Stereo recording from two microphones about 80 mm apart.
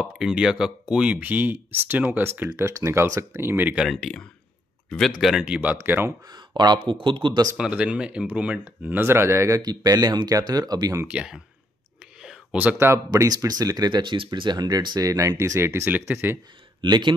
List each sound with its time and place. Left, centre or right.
0.0 s speech: centre; by 3.7 s right
3.9 s speech: centre
5.2 s speech: centre
5.8 s speech: right
6.2 s speech: right
7.5 s speech: centre; by 9.6 s right
9.6 s speech: right
11.1 s speech: centre
12.2 s whispering: centre
12.7 s speech: right
13.1 s speech: right
16.8 s speech: right